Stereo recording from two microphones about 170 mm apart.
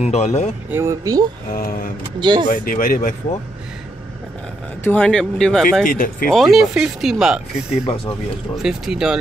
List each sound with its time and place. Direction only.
0.0 s speech: 40° left (ahead or behind)
0.7 s speech: 15° right (ahead or behind)
1.5 s speech: 55° left (ahead or behind)
2.1 s speech: 25° right (ahead or behind)
2.5 s speech: 55° left (ahead or behind)
4.8 s speech: 5° left (ahead or behind)
5.9 s speech: 55° left (ahead or behind)
6.2 s speech: centre (ahead or behind)
7.8 s speech: 35° left (ahead or behind)
8.6 s speech: 5° right (ahead or behind)